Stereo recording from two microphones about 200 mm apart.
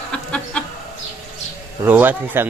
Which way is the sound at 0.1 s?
5° left (ahead or behind).